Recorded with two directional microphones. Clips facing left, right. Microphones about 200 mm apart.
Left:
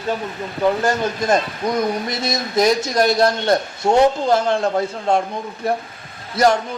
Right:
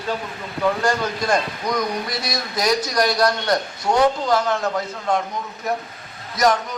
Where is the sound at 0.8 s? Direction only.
25° left (ahead or behind).